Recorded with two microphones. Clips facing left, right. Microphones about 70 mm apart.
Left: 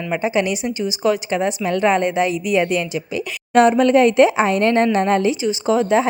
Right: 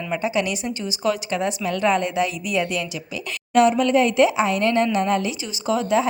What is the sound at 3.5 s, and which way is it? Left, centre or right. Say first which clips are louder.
Speech: left 4 dB; left.